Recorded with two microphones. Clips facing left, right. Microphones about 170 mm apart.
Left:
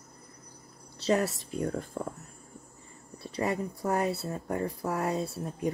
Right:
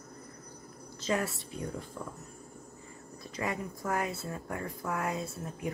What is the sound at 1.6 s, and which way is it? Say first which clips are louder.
Speech: left 7 dB; 55° left (ahead or behind).